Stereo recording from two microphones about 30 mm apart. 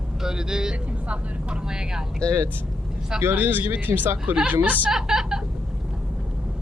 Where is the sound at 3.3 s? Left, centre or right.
Right.